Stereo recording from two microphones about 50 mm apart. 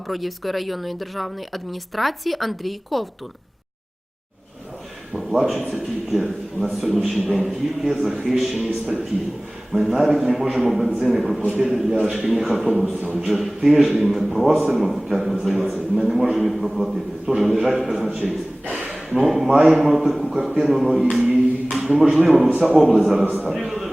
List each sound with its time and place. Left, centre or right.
0.1 s speech: centre
5.1 s speech: centre
18.8 s a sound: centre
19.2 s speech: centre
21.2 s a sound: centre
22.2 s a man's voice: centre